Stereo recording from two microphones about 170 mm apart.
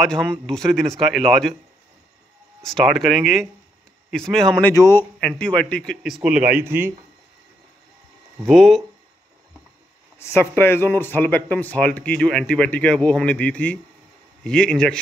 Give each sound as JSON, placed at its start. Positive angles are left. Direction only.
{"t": 0.0, "sound": "speech", "side_deg": 5}
{"t": 2.6, "sound": "speech", "side_deg": 0}
{"t": 4.7, "sound": "speech", "side_deg": 20}
{"t": 5.4, "sound": "speech", "side_deg": 5}
{"t": 8.5, "sound": "speech", "side_deg": 0}
{"t": 10.1, "sound": "speech", "side_deg": 15}